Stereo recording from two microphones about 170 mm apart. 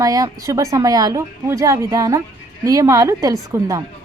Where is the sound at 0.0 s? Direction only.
20° right (ahead or behind).